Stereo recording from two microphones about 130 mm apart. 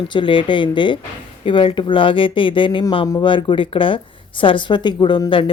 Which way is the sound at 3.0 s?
25° left (ahead or behind).